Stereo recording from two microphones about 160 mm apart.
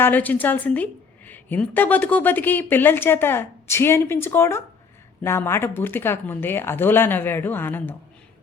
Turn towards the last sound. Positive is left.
turn(degrees=15)  # may be behind; listen again after turning